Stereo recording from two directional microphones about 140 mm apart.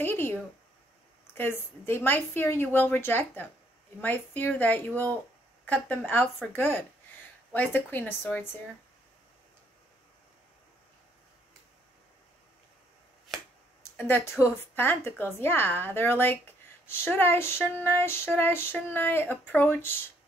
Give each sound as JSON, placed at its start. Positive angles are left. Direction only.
{"t": 0.0, "sound": "a sound", "side_deg": 15}
{"t": 1.3, "sound": "a woman's voice", "side_deg": 15}
{"t": 13.9, "sound": "a woman's voice", "side_deg": 15}